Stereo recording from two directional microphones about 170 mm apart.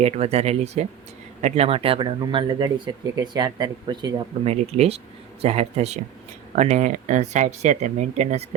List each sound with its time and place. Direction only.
0.0 s speech: 40° right (ahead or behind)
4.4 s speech: 40° right (ahead or behind)